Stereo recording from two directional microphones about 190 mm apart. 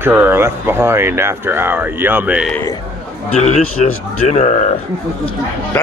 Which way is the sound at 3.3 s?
35° left (ahead or behind).